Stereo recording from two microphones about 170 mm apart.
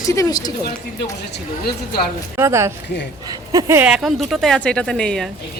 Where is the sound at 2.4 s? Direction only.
15° right (ahead or behind).